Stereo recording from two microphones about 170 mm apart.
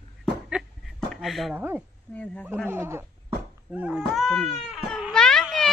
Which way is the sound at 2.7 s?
15° right (ahead or behind).